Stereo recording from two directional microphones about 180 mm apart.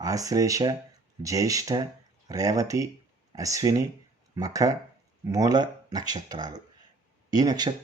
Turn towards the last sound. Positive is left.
turn(degrees=-20)  # may be behind; listen again after turning